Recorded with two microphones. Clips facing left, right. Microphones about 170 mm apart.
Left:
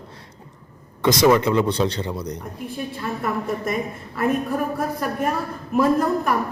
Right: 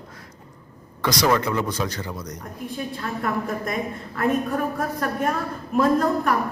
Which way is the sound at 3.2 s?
5° left (ahead or behind).